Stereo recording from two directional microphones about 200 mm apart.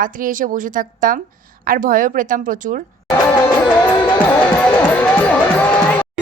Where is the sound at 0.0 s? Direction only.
45° right (ahead or behind).